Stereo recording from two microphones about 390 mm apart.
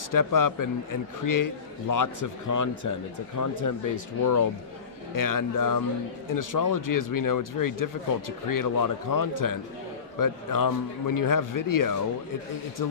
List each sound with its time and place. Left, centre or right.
0.1 s a man's voice: left